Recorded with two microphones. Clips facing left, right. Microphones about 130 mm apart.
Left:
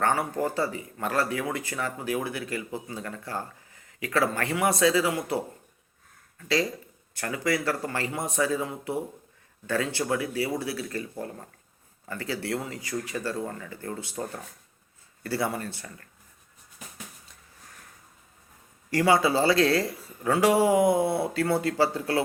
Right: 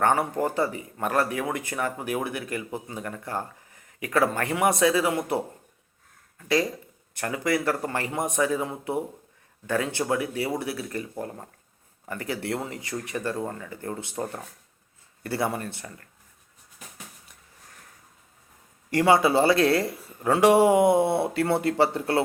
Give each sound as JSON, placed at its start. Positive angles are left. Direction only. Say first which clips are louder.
{"t": 0.0, "sound": "speech", "louder": "right 3 dB", "side_deg": -20}
{"t": 7.1, "sound": "speech", "louder": "right 2 dB", "side_deg": -20}
{"t": 18.9, "sound": "speech", "louder": "right 2 dB", "side_deg": -25}